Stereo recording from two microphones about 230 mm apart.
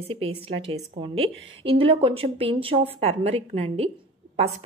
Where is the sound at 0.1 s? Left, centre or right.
Right.